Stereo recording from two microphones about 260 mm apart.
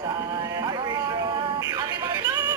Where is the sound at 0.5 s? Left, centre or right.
Centre.